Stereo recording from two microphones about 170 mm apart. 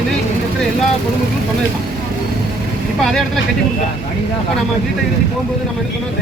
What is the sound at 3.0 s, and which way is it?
Speech, centre (ahead or behind).